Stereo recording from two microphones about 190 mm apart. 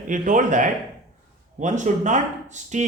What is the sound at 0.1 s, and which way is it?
A man's voice, 45° right (ahead or behind).